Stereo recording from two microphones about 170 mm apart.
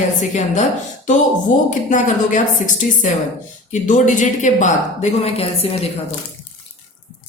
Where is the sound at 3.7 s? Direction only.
45° left (ahead or behind).